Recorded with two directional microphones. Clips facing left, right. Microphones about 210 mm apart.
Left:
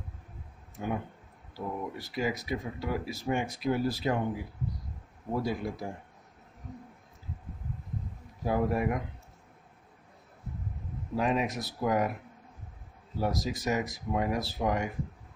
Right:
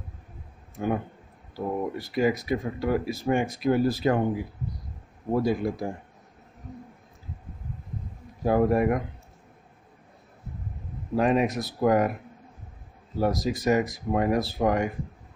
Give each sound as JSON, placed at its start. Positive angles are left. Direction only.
{"t": 0.7, "sound": "speech", "side_deg": -55}
{"t": 5.3, "sound": "speech", "side_deg": -60}
{"t": 8.5, "sound": "speech", "side_deg": -55}
{"t": 11.1, "sound": "speech", "side_deg": -55}
{"t": 13.2, "sound": "speech", "side_deg": -55}